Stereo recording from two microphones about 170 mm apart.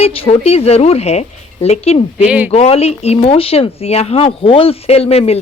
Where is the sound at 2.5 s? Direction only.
35° left (ahead or behind).